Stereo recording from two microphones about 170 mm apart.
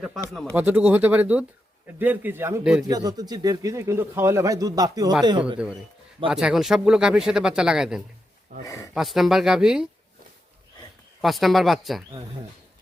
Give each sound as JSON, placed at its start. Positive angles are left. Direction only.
{"t": 0.5, "sound": "speech", "side_deg": -10}
{"t": 2.8, "sound": "speech", "side_deg": -20}
{"t": 6.3, "sound": "speech", "side_deg": -5}
{"t": 8.6, "sound": "speech", "side_deg": 20}
{"t": 9.0, "sound": "speech", "side_deg": 0}
{"t": 11.2, "sound": "speech", "side_deg": 0}